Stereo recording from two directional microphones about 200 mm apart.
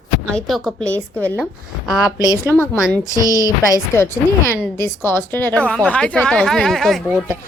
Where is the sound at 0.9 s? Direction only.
10° right (ahead or behind).